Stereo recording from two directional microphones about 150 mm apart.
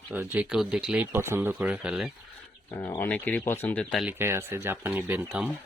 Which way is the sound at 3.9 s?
5° right (ahead or behind).